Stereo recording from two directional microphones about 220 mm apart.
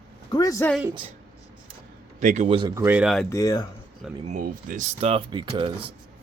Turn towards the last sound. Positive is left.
turn(degrees=-25)  # may be behind; listen again after turning